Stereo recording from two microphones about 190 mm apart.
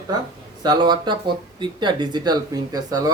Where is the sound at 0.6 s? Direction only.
20° right (ahead or behind).